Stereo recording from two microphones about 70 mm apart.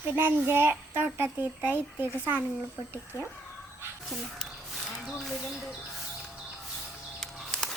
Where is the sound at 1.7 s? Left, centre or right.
Right.